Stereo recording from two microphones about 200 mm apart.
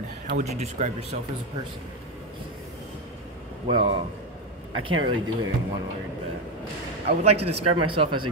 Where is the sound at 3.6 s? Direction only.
25° right (ahead or behind).